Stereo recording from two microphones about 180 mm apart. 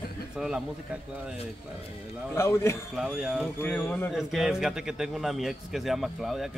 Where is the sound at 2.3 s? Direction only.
15° left (ahead or behind).